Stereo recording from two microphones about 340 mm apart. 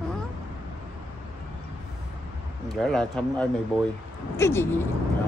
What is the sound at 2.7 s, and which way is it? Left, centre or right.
A woman's voice, centre.